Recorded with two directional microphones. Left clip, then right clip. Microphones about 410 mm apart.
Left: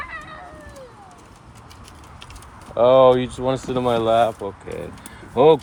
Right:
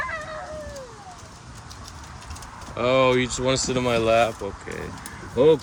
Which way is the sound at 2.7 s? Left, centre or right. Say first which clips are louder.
Left 7 dB; centre.